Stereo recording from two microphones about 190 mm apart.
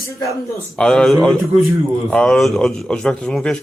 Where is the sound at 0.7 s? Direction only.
5° left (ahead or behind).